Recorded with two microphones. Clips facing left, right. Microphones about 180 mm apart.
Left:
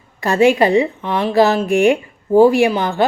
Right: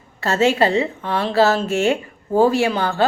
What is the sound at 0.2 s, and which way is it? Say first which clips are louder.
A woman's voice: left 4 dB; 15° left (ahead or behind).